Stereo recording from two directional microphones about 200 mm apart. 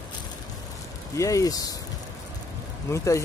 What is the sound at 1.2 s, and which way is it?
Speech, 15° left (ahead or behind).